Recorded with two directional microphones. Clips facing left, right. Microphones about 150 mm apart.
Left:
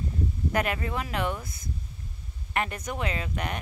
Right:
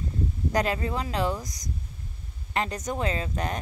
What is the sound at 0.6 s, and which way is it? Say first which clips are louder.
Speech: right 2 dB; 30° right (ahead or behind).